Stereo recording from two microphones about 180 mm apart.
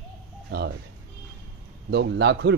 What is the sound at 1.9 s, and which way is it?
Speech, 75° right (ahead or behind).